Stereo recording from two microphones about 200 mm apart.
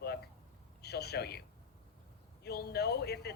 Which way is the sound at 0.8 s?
55° left (ahead or behind).